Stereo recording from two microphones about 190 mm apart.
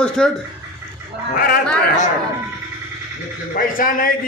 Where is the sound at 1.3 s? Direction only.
50° left (ahead or behind).